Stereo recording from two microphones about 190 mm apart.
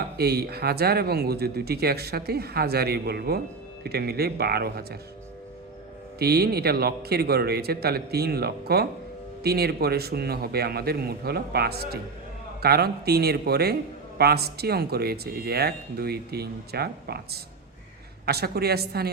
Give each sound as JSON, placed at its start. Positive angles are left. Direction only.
{"t": 0.2, "sound": "speech", "side_deg": -55}
{"t": 6.1, "sound": "speech", "side_deg": -55}